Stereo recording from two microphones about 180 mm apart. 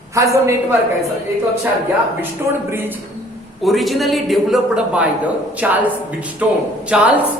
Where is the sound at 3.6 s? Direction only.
Centre (ahead or behind).